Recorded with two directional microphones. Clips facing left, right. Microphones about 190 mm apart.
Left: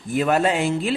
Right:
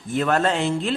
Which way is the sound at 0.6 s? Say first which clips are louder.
Left 1 dB; 5° left (ahead or behind).